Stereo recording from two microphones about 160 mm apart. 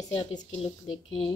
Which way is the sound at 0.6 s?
35° left (ahead or behind).